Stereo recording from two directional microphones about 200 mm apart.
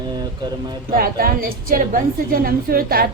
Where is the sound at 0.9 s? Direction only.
45° right (ahead or behind).